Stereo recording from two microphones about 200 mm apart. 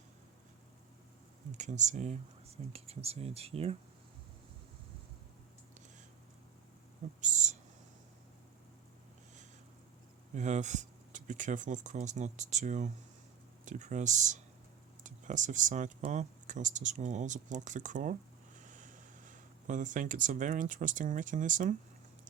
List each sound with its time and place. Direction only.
1.5 s speech: 35° right (ahead or behind)
7.2 s speech: 35° right (ahead or behind)
10.3 s speech: 35° right (ahead or behind)